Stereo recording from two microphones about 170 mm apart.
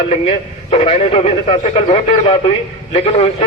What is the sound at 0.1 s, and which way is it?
A man's voice, 35° left (ahead or behind).